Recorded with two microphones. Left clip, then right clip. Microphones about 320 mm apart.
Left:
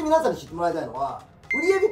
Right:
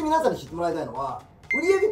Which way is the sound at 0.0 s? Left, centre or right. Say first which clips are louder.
Left 1 dB; centre.